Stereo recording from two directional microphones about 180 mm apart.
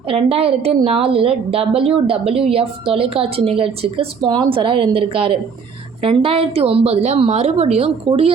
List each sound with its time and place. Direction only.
0.1 s a woman's voice: 30° right (ahead or behind)